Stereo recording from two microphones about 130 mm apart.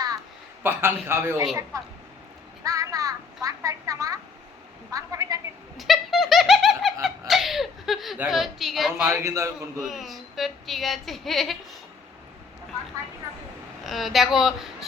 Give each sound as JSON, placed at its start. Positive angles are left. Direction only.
{"t": 0.6, "sound": "a man's voice", "side_deg": -20}
{"t": 2.6, "sound": "a sound", "side_deg": -25}
{"t": 5.7, "sound": "a sound", "side_deg": 0}
{"t": 8.3, "sound": "speech", "side_deg": 0}
{"t": 9.2, "sound": "a man's voice", "side_deg": -20}
{"t": 9.8, "sound": "speech", "side_deg": 0}
{"t": 13.8, "sound": "speech", "side_deg": 0}